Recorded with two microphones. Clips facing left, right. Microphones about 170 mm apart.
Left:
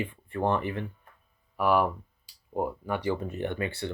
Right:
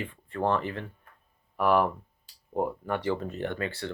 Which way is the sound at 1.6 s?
5° left (ahead or behind).